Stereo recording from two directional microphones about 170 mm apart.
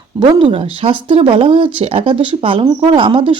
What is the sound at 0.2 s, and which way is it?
Speech, 30° right (ahead or behind).